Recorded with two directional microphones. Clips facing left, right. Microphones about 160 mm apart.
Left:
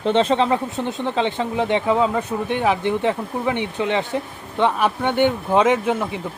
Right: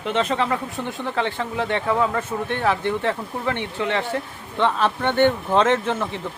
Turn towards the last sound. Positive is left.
turn(degrees=10)  # may be behind; listen again after turning